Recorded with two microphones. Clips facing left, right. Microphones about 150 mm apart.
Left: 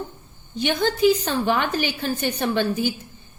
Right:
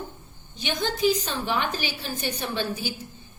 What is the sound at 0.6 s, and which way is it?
A woman's voice, 55° left (ahead or behind).